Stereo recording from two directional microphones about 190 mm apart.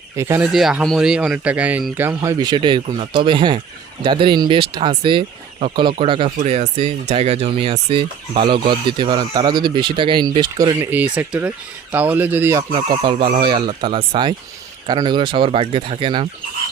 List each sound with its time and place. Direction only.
0.2 s speech: 10° right (ahead or behind)
0.5 s speech: centre (ahead or behind); by 10.8 s 25° right (ahead or behind)
10.8 s speech: 10° right (ahead or behind); by 16.3 s 30° right (ahead or behind)